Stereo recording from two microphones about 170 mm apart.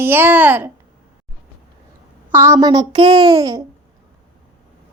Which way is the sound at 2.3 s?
15° right (ahead or behind).